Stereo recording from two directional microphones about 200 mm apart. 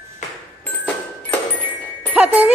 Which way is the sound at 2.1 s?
5° right (ahead or behind).